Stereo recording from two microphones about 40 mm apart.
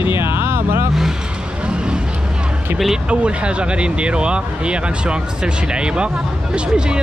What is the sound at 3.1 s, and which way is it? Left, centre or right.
Speech, right.